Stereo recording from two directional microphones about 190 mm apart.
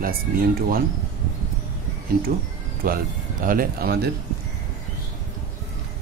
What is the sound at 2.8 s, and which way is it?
Speech, 50° right (ahead or behind).